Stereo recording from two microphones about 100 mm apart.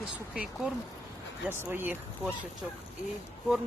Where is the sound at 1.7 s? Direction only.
20° right (ahead or behind).